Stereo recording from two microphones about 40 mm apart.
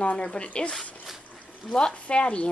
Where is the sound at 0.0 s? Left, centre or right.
Left.